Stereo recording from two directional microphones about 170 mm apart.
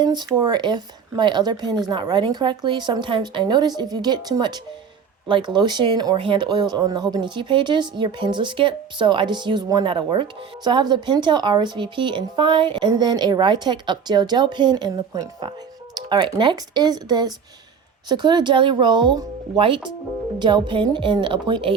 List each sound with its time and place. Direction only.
0.0 s speech: 25° right (ahead or behind)